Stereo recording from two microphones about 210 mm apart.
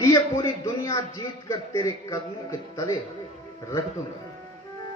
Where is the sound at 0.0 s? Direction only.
15° left (ahead or behind).